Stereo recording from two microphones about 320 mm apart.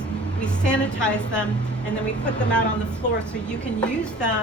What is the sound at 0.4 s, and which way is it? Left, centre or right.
A woman's voice, centre.